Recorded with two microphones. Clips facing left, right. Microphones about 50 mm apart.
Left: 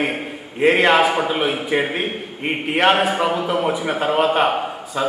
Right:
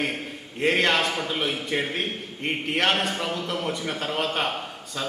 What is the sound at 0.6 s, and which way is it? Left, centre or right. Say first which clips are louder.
A man's voice: left 8 dB; centre.